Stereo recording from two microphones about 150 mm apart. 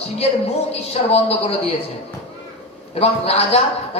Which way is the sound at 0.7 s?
45° left (ahead or behind).